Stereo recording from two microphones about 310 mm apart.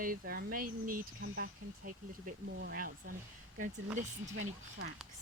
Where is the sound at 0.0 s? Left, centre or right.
Right.